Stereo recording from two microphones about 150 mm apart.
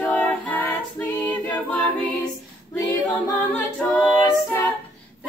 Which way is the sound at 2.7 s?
15° left (ahead or behind).